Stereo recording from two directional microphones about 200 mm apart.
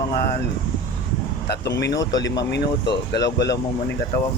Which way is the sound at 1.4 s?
55° left (ahead or behind).